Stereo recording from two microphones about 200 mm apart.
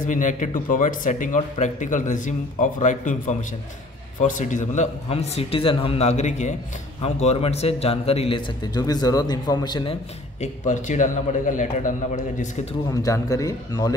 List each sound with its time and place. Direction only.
0.0 s a man's voice: 40° left (ahead or behind); by 9.9 s 20° left (ahead or behind)
10.4 s speech: 35° left (ahead or behind)
12.9 s a man's voice: 15° left (ahead or behind)